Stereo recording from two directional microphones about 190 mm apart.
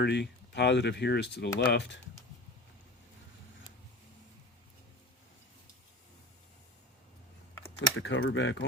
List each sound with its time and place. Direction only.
0.0 s speech: 65° left (ahead or behind)
7.8 s speech: 75° left (ahead or behind)